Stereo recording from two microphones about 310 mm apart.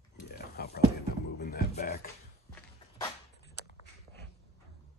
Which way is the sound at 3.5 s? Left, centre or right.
Left.